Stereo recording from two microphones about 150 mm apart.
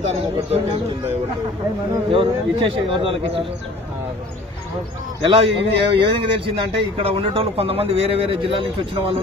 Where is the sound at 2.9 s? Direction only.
35° right (ahead or behind).